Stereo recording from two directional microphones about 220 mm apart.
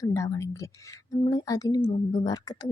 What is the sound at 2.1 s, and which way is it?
Speech, 20° left (ahead or behind).